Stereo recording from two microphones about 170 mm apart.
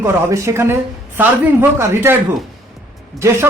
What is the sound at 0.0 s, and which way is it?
A man's voice, 15° right (ahead or behind).